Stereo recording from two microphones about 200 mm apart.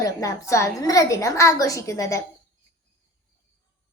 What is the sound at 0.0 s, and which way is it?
A woman's voice, 15° left (ahead or behind).